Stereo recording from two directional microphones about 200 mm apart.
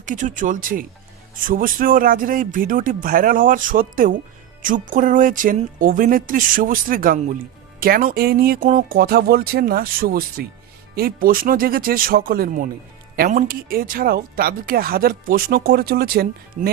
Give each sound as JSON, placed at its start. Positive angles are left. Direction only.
{"t": 0.0, "sound": "speech", "side_deg": -40}